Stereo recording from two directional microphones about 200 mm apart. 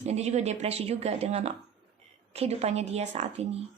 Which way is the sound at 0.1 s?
35° right (ahead or behind).